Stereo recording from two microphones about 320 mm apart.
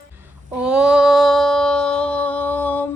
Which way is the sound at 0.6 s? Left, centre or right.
Centre.